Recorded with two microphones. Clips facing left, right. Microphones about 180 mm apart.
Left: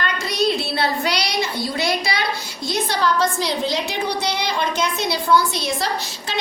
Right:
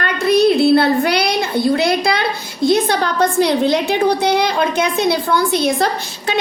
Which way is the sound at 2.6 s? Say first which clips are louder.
Right 6 dB; 55° right (ahead or behind).